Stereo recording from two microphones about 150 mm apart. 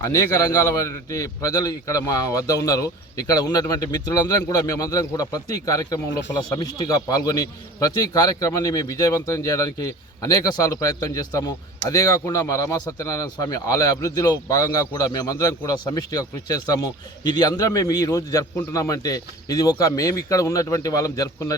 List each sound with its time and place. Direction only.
0.0 s a man's voice: 20° left (ahead or behind)